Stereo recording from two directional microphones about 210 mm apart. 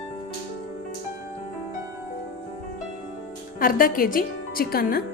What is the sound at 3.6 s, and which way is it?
A woman's voice, 40° left (ahead or behind).